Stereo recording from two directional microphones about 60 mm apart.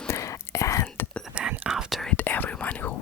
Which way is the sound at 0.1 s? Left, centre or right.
Left.